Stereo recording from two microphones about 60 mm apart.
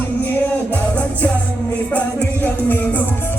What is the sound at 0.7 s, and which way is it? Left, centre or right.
Music, left.